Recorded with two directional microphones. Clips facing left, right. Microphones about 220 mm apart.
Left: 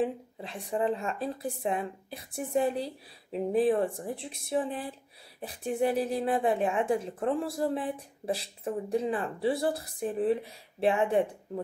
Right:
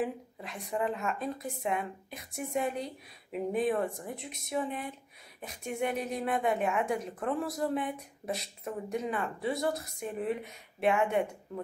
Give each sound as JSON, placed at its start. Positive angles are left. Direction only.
{"t": 0.0, "sound": "speech", "side_deg": 30}